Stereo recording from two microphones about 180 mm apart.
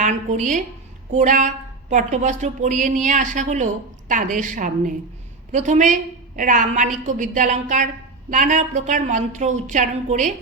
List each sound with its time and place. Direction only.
0.0 s a woman's voice: 40° right (ahead or behind)